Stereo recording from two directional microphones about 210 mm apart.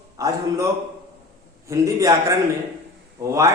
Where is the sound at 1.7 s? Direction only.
15° right (ahead or behind).